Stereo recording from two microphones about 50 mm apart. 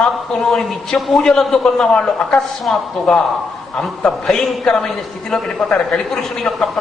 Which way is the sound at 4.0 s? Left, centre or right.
Centre.